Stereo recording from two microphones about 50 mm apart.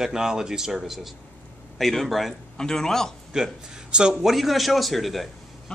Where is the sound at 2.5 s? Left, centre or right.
Centre.